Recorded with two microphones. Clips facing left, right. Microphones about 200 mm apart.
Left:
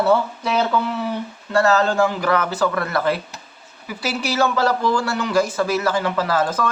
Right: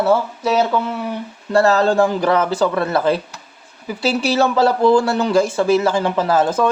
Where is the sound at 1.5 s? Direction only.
35° right (ahead or behind).